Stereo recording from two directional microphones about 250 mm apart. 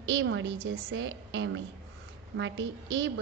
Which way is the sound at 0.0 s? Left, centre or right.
Right.